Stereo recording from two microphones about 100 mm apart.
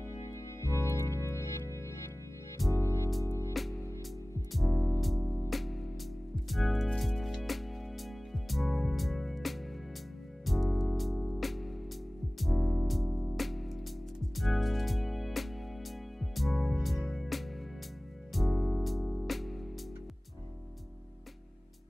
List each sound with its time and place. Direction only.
0.0 s music: 30° left (ahead or behind)
3.5 s music: centre (ahead or behind)
4.7 s music: 25° left (ahead or behind)
5.5 s music: centre (ahead or behind)